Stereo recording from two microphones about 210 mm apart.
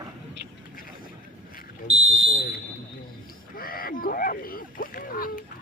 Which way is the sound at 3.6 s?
45° left (ahead or behind).